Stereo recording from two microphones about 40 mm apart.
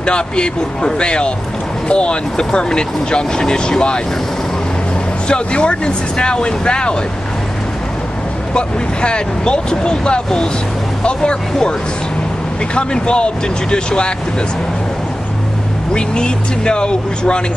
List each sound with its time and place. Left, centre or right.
0.0 s speech: left
5.3 s speech: left
8.5 s speech: left
12.7 s speech: left
15.9 s speech: left